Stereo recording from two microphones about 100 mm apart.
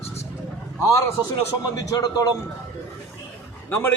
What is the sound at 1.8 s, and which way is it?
Speech, 40° left (ahead or behind).